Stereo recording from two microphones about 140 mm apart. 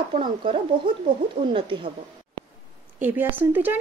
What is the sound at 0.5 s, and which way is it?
Speech, 35° right (ahead or behind).